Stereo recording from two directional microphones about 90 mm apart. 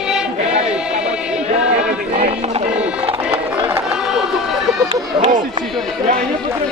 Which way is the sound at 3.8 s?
5° right (ahead or behind).